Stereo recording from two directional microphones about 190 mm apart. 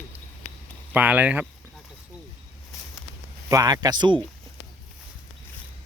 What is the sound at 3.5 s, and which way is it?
Speech, 20° right (ahead or behind).